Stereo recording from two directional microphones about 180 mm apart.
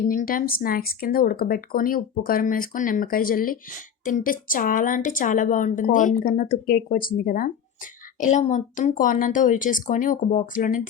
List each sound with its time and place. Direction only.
0.1 s speech: 50° left (ahead or behind)
8.2 s speech: 40° left (ahead or behind)